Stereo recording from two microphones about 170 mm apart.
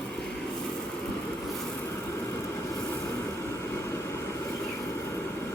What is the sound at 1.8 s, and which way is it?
Vehicle, 15° left (ahead or behind).